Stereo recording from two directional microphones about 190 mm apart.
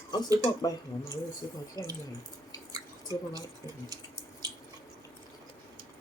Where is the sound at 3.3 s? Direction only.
20° right (ahead or behind).